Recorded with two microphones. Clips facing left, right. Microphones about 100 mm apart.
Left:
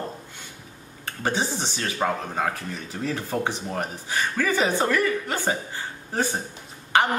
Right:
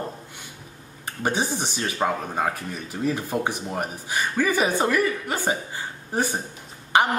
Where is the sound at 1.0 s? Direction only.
15° right (ahead or behind).